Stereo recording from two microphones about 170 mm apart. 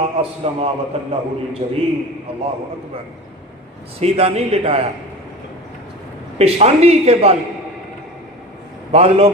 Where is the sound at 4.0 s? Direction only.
35° right (ahead or behind).